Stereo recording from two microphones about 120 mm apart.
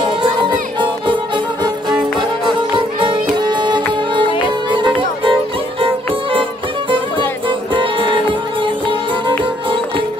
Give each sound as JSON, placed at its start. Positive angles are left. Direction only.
{"t": 0.0, "sound": "music", "side_deg": -40}